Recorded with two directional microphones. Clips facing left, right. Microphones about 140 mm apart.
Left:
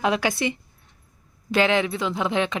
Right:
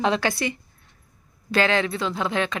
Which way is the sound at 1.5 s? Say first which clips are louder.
Left 1 dB; 15° left (ahead or behind).